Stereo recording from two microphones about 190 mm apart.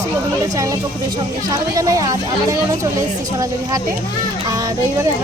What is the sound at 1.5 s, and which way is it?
Speech, 15° right (ahead or behind).